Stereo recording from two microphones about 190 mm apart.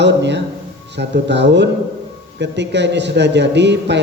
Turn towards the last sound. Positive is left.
turn(degrees=-65)  # may be behind; listen again after turning